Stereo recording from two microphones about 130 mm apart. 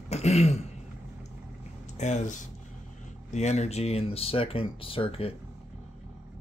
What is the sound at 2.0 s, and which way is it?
Speech, 65° left (ahead or behind).